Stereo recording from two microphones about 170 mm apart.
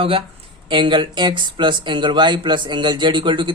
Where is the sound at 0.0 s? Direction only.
35° right (ahead or behind).